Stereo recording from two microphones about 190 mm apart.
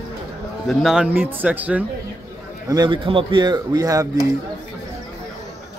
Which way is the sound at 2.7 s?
20° right (ahead or behind).